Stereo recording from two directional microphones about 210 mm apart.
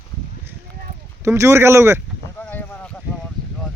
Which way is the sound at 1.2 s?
15° right (ahead or behind).